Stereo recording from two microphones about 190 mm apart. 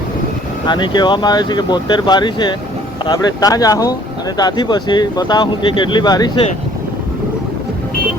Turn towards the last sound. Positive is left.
turn(degrees=20)  # may be behind; listen again after turning